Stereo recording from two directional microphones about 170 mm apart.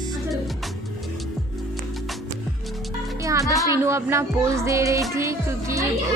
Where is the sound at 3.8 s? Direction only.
15° right (ahead or behind).